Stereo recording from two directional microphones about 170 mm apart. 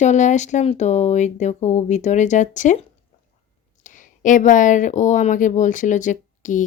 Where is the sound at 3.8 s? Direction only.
50° left (ahead or behind).